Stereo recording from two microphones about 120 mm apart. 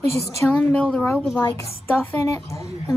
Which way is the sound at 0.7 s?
10° left (ahead or behind).